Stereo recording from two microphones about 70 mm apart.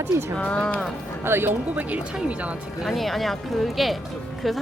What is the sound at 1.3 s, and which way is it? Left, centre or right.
Speech, right.